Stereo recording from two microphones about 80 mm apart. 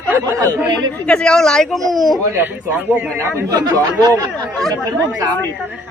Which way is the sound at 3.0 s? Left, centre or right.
Right.